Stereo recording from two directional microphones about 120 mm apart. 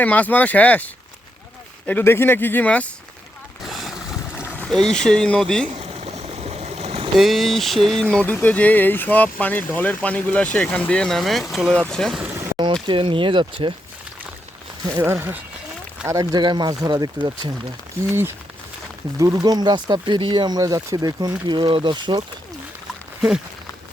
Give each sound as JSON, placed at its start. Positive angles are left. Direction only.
{"t": 0.0, "sound": "speech", "side_deg": 15}
{"t": 1.9, "sound": "speech", "side_deg": 15}
{"t": 3.7, "sound": "vehicle", "side_deg": 0}
{"t": 4.4, "sound": "boat", "side_deg": 15}
{"t": 4.7, "sound": "speech", "side_deg": 5}
{"t": 5.8, "sound": "vehicle", "side_deg": -65}
{"t": 7.2, "sound": "speech", "side_deg": 0}
{"t": 12.8, "sound": "speech", "side_deg": -45}
{"t": 14.9, "sound": "speech", "side_deg": -20}
{"t": 16.0, "sound": "speech", "side_deg": -30}
{"t": 16.4, "sound": "speech", "side_deg": -40}
{"t": 19.2, "sound": "speech", "side_deg": -30}